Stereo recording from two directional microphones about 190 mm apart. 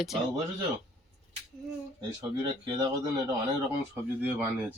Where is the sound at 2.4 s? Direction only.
25° right (ahead or behind).